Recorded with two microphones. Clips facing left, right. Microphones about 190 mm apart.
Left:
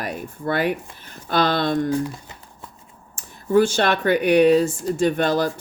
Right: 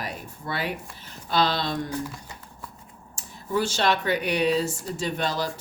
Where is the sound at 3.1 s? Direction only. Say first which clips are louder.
Left 10 dB; 55° left (ahead or behind).